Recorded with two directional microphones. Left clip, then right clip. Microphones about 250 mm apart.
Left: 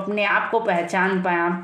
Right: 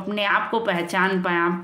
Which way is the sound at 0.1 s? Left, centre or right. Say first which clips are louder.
Left 1 dB; right.